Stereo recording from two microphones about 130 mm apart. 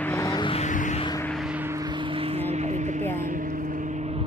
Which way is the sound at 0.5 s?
70° left (ahead or behind).